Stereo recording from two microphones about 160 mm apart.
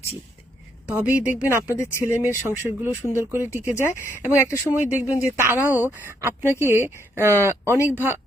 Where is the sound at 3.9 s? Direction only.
15° left (ahead or behind).